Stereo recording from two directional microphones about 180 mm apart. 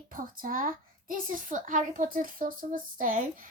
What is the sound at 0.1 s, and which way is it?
A woman's voice, 50° right (ahead or behind).